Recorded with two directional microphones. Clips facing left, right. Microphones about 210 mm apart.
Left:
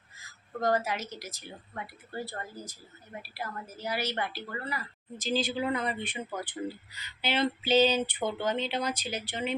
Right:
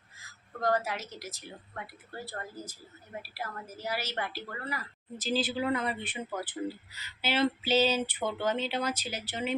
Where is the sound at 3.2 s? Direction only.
5° right (ahead or behind).